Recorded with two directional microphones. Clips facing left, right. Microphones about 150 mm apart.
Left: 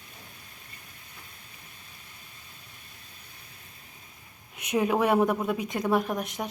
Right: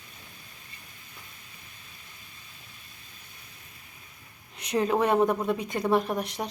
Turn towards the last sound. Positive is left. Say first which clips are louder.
# right 1 dB
turn(degrees=0)  # may be behind; listen again after turning